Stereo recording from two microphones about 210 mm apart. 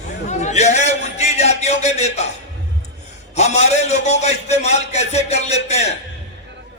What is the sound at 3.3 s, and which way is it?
Speech, 30° left (ahead or behind).